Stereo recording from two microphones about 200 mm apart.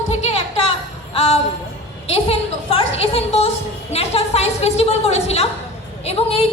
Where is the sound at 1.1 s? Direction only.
30° left (ahead or behind).